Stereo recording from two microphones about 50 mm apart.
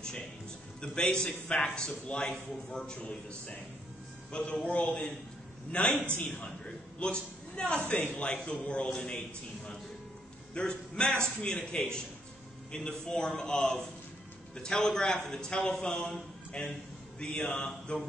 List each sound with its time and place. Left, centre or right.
0.7 s a man's voice: centre
10.5 s a man's voice: centre